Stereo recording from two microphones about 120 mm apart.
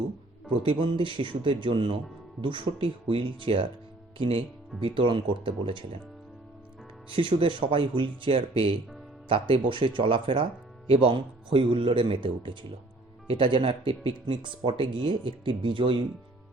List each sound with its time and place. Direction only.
0.5 s speech: 50° right (ahead or behind)
7.1 s speech: 45° right (ahead or behind)